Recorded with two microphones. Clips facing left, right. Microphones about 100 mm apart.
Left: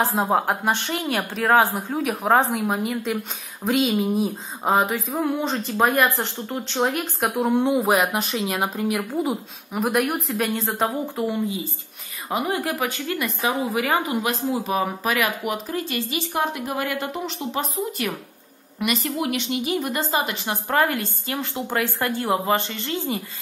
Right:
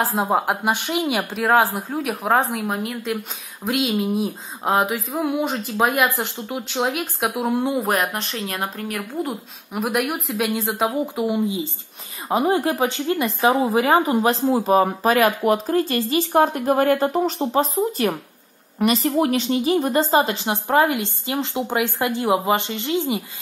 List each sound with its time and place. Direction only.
0.0 s a woman's voice: centre (ahead or behind)